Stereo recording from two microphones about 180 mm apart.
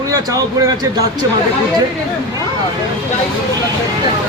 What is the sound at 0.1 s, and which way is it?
Speech, 20° right (ahead or behind).